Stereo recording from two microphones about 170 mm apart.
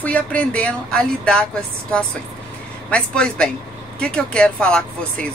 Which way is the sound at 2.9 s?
5° left (ahead or behind).